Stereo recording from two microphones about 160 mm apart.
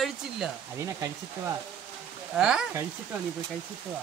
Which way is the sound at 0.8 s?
15° right (ahead or behind).